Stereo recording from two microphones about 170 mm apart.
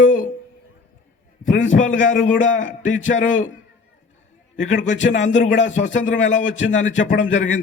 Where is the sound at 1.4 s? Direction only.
50° left (ahead or behind).